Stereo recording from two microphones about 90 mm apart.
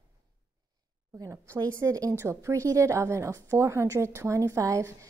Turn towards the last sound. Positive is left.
turn(degrees=-35)  # may be behind; listen again after turning